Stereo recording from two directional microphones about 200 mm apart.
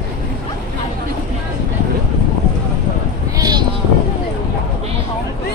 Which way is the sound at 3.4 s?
20° right (ahead or behind).